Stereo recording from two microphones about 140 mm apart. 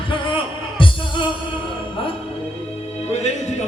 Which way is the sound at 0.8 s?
35° left (ahead or behind).